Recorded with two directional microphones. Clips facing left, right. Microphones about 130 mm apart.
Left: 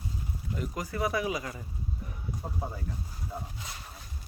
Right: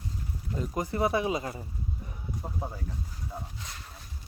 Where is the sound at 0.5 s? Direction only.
25° right (ahead or behind).